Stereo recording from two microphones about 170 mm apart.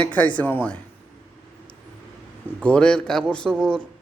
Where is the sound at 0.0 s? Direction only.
10° left (ahead or behind).